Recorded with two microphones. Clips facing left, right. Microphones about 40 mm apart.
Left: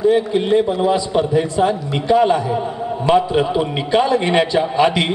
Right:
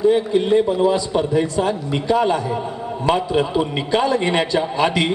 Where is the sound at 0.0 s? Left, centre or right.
Centre.